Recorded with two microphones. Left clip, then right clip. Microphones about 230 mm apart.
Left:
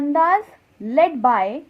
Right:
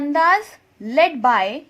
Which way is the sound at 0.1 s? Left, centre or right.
Centre.